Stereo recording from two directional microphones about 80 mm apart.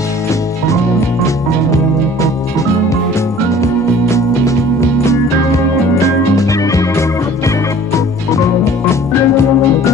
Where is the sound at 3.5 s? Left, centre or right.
Left.